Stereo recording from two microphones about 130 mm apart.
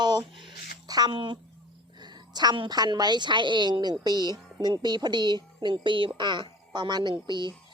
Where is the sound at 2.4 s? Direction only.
35° right (ahead or behind).